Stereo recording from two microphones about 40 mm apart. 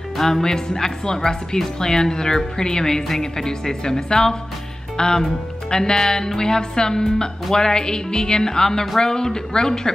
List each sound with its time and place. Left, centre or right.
0.2 s speech: centre